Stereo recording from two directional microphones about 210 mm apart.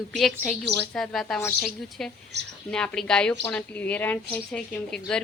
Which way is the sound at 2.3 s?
55° right (ahead or behind).